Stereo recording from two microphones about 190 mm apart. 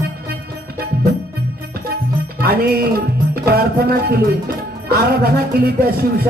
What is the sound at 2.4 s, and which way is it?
Music, 55° right (ahead or behind).